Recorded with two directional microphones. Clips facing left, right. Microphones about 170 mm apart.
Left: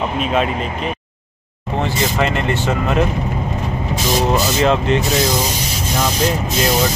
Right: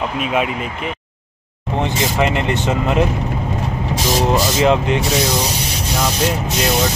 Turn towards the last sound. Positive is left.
turn(degrees=-15)  # may be behind; listen again after turning